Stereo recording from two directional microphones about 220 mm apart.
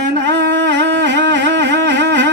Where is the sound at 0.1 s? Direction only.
50° right (ahead or behind).